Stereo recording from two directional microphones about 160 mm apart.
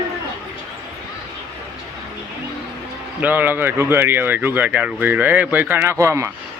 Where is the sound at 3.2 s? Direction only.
10° right (ahead or behind).